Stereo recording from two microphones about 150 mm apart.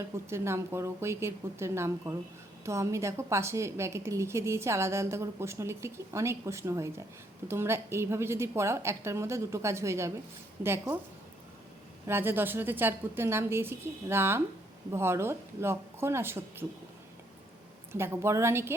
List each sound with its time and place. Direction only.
0.0 s a woman's voice: 15° right (ahead or behind)
12.0 s a woman's voice: 15° right (ahead or behind)
17.9 s a woman's voice: 15° right (ahead or behind)